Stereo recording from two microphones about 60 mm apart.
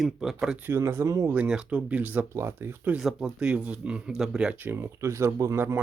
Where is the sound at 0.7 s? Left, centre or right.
Right.